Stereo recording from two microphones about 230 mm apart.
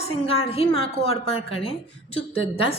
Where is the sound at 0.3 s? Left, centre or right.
Left.